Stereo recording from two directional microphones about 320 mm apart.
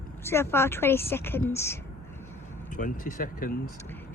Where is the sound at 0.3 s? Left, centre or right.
Centre.